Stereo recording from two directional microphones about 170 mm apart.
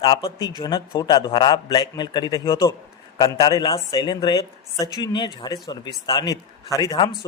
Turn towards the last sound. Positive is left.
turn(degrees=20)  # may be behind; listen again after turning